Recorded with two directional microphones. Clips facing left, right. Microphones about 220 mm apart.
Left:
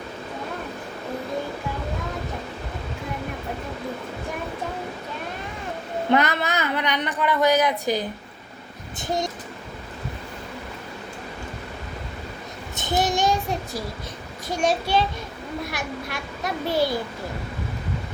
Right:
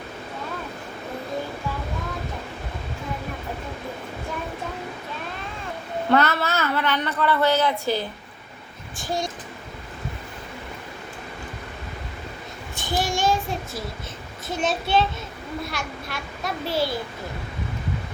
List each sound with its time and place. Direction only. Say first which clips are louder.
6.1 s speech: right 1 dB; 15° left (ahead or behind)
12.7 s child singing: left 3 dB; 20° left (ahead or behind)
14.4 s speech: left 3 dB; 10° left (ahead or behind)